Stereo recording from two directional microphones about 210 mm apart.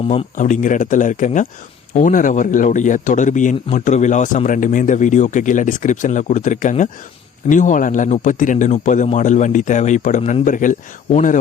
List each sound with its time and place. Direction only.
0.1 s speech: 35° left (ahead or behind)